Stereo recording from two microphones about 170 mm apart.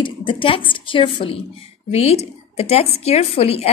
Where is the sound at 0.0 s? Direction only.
30° left (ahead or behind).